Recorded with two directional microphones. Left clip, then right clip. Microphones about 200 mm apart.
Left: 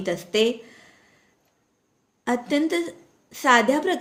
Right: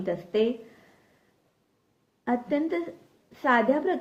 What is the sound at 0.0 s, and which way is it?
Speech, 40° left (ahead or behind).